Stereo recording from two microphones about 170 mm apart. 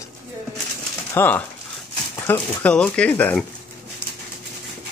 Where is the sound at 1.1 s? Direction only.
10° left (ahead or behind).